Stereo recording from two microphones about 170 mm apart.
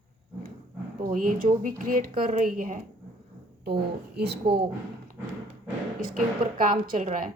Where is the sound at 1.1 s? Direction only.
55° right (ahead or behind).